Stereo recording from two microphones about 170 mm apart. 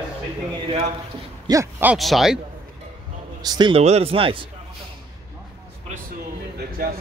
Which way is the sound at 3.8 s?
35° right (ahead or behind).